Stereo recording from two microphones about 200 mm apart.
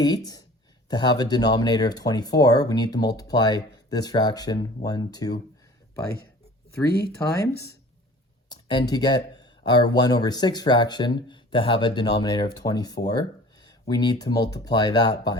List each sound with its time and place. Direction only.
0.0 s speech: 20° left (ahead or behind)
7.3 s speech: 15° left (ahead or behind)